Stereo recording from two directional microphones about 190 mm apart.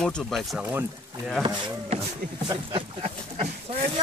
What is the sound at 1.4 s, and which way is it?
Speech, 25° right (ahead or behind).